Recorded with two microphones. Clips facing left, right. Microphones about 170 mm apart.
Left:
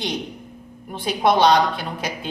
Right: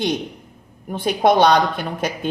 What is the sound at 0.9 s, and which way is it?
A woman's voice, 50° right (ahead or behind).